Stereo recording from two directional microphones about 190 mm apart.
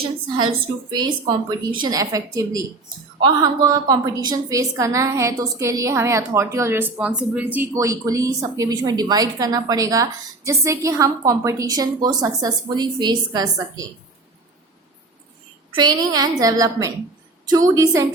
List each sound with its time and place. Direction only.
0.0 s a woman's voice: 25° right (ahead or behind)
15.7 s a woman's voice: 20° right (ahead or behind)